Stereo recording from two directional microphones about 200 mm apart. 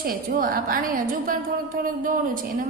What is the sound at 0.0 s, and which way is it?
A woman's voice, 45° right (ahead or behind).